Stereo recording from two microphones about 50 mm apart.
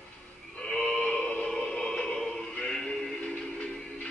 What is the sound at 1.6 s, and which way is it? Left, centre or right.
Music, centre.